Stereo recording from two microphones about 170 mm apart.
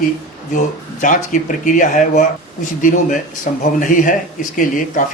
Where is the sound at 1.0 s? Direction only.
50° left (ahead or behind).